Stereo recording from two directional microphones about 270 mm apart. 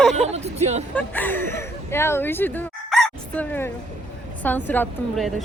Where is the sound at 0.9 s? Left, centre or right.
Centre.